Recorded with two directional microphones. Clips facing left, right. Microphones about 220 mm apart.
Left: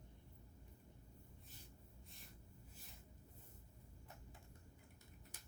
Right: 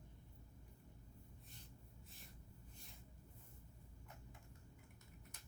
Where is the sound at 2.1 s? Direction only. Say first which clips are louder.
Even; centre (ahead or behind).